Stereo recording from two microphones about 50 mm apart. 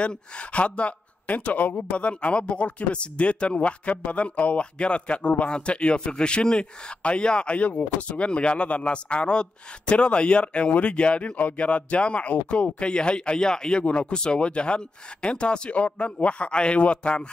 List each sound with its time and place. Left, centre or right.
0.0 s speech: left